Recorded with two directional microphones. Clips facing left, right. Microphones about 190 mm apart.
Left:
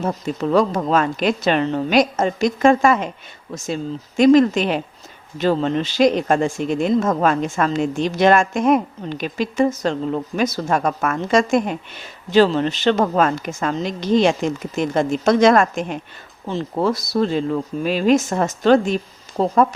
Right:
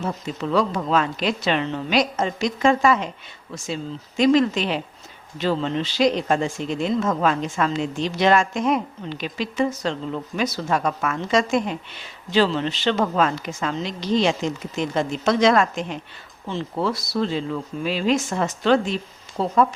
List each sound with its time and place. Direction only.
0.0 s a woman's voice: 40° left (ahead or behind)
4.2 s a woman's voice: 50° left (ahead or behind)